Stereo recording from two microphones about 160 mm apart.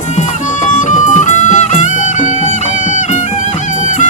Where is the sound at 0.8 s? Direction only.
50° left (ahead or behind).